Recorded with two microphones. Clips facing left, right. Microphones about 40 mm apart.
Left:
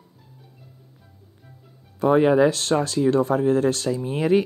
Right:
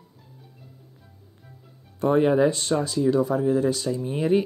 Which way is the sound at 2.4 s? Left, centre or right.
Left.